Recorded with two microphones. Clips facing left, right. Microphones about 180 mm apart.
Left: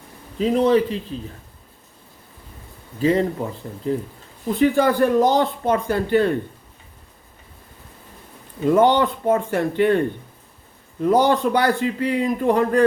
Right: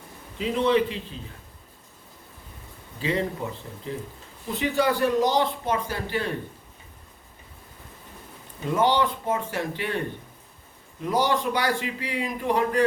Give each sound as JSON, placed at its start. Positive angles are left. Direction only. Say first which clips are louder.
{"t": 0.3, "sound": "a man's voice", "louder": "left 5 dB", "side_deg": 40}
{"t": 3.0, "sound": "a man's voice", "louder": "left 8 dB", "side_deg": 40}
{"t": 8.7, "sound": "a man's voice", "louder": "left 6 dB", "side_deg": 55}
{"t": 11.0, "sound": "a man's voice", "louder": "left 7 dB", "side_deg": 55}